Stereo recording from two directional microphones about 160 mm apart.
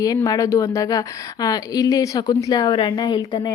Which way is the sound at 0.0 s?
20° left (ahead or behind).